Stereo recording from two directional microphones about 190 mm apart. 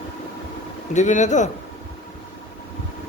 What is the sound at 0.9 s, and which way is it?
Speech, 40° left (ahead or behind).